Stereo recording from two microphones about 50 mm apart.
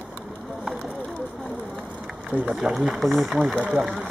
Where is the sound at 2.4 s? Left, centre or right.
Centre.